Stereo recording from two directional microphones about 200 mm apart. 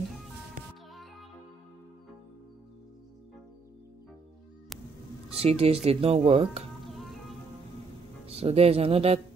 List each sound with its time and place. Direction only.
5.4 s speech: 30° right (ahead or behind)
8.3 s speech: 30° right (ahead or behind)